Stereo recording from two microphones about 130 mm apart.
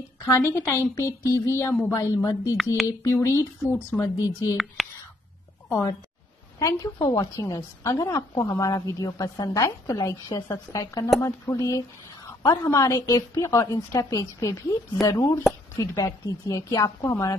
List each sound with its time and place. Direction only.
0.2 s a woman's voice: 20° left (ahead or behind)
4.0 s a woman's voice: 25° left (ahead or behind)
4.8 s a sound: centre (ahead or behind)
5.7 s a woman's voice: 20° left (ahead or behind)
7.0 s a woman's voice: 30° left (ahead or behind)